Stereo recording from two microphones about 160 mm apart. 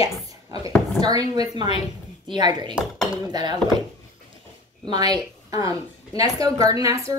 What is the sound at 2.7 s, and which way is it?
Speech, centre (ahead or behind).